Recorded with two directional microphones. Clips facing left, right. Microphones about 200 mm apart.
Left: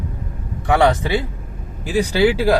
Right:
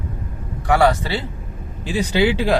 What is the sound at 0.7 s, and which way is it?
Speech, 20° left (ahead or behind).